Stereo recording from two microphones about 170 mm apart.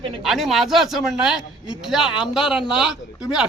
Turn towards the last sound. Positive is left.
turn(degrees=-5)  # may be behind; listen again after turning